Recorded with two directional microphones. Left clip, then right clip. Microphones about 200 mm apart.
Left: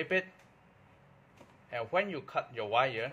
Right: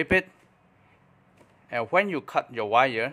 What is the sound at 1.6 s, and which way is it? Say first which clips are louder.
Speech: right 8 dB; 35° right (ahead or behind).